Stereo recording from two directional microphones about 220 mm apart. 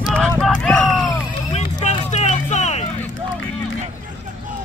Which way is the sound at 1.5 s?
30° left (ahead or behind).